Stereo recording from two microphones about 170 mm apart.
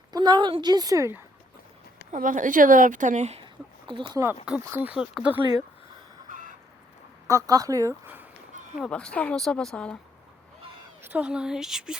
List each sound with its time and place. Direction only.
0.1 s a woman's voice: 25° right (ahead or behind)
2.1 s a woman's voice: 50° right (ahead or behind)
3.4 s a sound: 30° right (ahead or behind)
4.6 s speech: 10° right (ahead or behind)
7.3 s a woman's voice: 20° right (ahead or behind)
8.8 s speech: 5° left (ahead or behind)
11.0 s speech: 10° right (ahead or behind)